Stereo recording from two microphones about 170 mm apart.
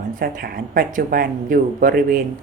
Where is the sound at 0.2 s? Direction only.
55° right (ahead or behind).